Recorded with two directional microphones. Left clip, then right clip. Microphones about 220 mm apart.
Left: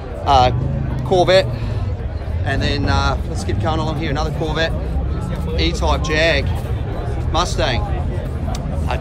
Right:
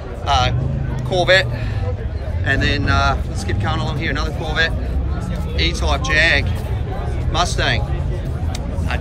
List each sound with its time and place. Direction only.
0.3 s music: 20° left (ahead or behind)
1.2 s a man's voice: 25° left (ahead or behind)
2.4 s speech: 5° left (ahead or behind)